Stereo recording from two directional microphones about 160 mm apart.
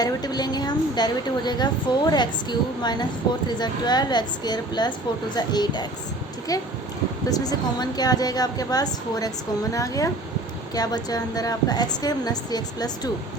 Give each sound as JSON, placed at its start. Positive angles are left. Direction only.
{"t": 0.0, "sound": "a woman's voice", "side_deg": 25}